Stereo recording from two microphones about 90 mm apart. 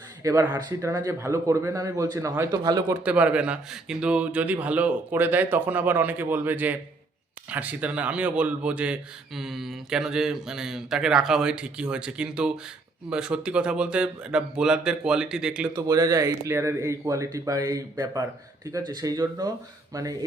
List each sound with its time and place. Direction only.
0.2 s speech: 35° right (ahead or behind)
0.4 s speech: 20° right (ahead or behind)
1.0 s speech: 35° right (ahead or behind)
3.0 s speech: 15° right (ahead or behind)
9.3 s speech: 5° right (ahead or behind)
15.7 s speech: 40° right (ahead or behind)